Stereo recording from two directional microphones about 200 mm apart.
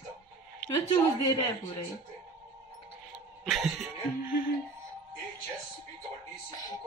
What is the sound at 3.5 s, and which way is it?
Music, centre (ahead or behind).